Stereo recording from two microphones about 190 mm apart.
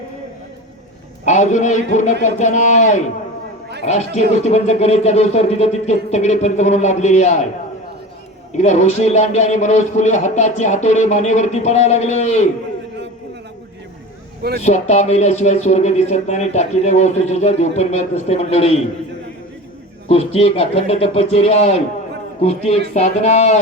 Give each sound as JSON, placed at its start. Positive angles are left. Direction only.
{"t": 1.2, "sound": "speech", "side_deg": 40}
{"t": 8.5, "sound": "speech", "side_deg": 40}
{"t": 14.6, "sound": "speech", "side_deg": 35}
{"t": 20.1, "sound": "speech", "side_deg": 30}